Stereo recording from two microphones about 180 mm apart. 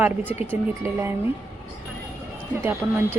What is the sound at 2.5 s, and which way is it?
Speech, 15° right (ahead or behind).